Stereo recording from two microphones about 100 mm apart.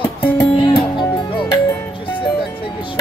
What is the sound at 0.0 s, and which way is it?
Music, 20° left (ahead or behind).